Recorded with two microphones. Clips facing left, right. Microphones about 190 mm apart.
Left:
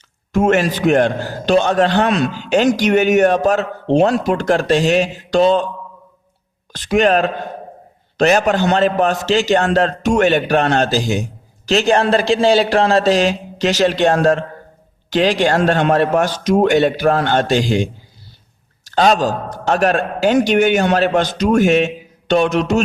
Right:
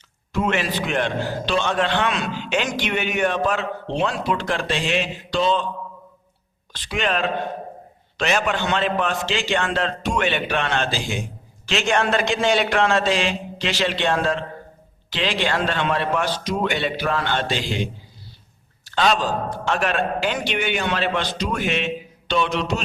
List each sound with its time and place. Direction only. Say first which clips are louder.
0.3 s a man's voice: left 8 dB; 45° left (ahead or behind)
6.7 s a man's voice: left 10 dB; 45° left (ahead or behind)
18.9 s a man's voice: left 6 dB; 40° left (ahead or behind)